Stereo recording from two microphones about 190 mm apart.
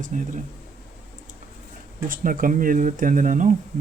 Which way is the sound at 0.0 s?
40° right (ahead or behind).